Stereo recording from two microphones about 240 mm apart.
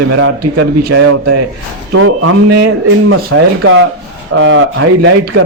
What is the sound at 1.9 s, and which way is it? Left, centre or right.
A man's voice, right.